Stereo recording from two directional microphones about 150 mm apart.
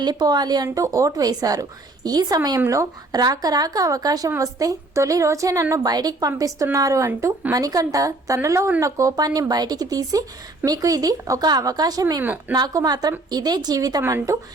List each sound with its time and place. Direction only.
0.0 s speech: 25° right (ahead or behind)
12.2 s speech: 10° right (ahead or behind)
12.5 s speech: 25° right (ahead or behind)